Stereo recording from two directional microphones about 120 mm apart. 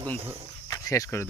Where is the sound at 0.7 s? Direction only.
25° left (ahead or behind).